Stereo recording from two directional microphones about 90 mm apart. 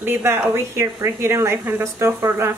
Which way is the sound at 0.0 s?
25° right (ahead or behind).